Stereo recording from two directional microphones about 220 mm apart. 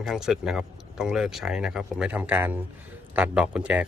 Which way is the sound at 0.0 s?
Centre (ahead or behind).